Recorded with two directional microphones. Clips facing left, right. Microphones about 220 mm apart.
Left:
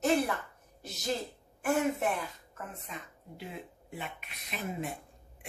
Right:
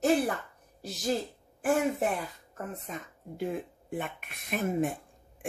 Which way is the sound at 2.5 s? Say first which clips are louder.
Right 5 dB; 40° right (ahead or behind).